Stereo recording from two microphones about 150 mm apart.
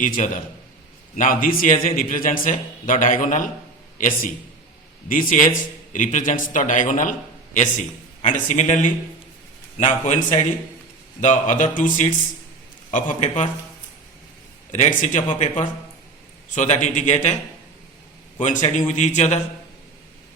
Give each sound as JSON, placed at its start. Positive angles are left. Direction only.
{"t": 0.0, "sound": "a man's voice", "side_deg": 60}
{"t": 14.7, "sound": "a man's voice", "side_deg": 55}
{"t": 18.3, "sound": "a man's voice", "side_deg": 55}